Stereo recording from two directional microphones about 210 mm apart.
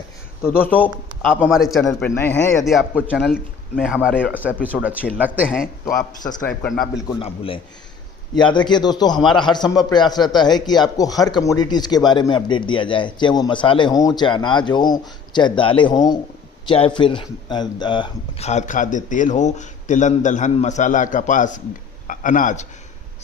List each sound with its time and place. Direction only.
0.6 s a man's voice: 10° left (ahead or behind)
1.8 s a man's voice: 10° left (ahead or behind)
2.6 s speech: 5° right (ahead or behind)
5.8 s a man's voice: 15° left (ahead or behind)
6.5 s speech: 5° left (ahead or behind)
7.2 s speech: 25° left (ahead or behind)